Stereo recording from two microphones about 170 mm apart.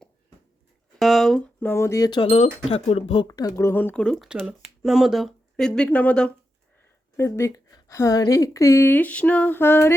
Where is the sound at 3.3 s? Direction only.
20° left (ahead or behind).